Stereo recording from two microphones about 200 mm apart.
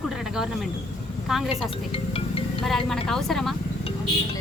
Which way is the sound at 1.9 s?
30° left (ahead or behind).